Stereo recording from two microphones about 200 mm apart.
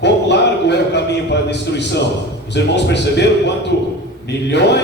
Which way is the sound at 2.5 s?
60° left (ahead or behind).